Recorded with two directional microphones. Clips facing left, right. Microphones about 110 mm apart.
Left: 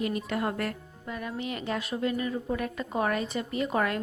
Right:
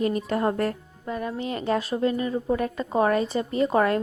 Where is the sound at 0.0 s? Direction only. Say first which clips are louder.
Right 6 dB; 35° right (ahead or behind).